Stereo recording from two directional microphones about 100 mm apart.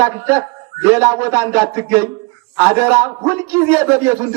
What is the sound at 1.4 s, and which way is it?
Speech, 20° right (ahead or behind).